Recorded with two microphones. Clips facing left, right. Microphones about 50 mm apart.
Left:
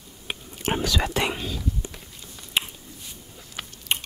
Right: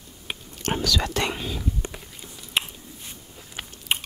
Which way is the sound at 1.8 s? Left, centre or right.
Right.